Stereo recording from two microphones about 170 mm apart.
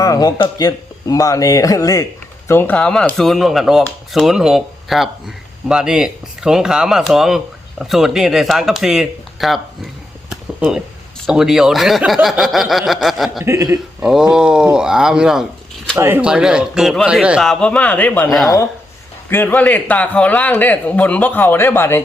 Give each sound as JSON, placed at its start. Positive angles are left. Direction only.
{"t": 0.0, "sound": "speech", "side_deg": 20}
{"t": 10.2, "sound": "a sound", "side_deg": -5}
{"t": 11.3, "sound": "speech", "side_deg": 0}
{"t": 13.4, "sound": "speech", "side_deg": -20}
{"t": 14.0, "sound": "a man's voice", "side_deg": -5}